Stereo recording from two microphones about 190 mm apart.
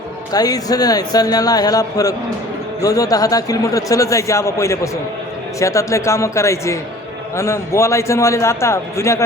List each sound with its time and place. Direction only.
0.3 s a man's voice: 20° left (ahead or behind)